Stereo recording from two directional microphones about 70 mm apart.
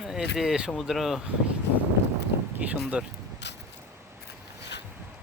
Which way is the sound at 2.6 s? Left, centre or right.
Right.